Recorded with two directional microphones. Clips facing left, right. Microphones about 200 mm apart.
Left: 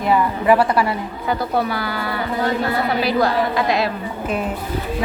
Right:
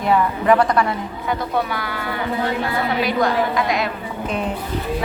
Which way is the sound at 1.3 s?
35° left (ahead or behind).